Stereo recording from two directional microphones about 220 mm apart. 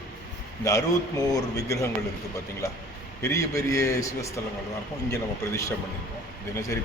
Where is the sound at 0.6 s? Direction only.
15° left (ahead or behind).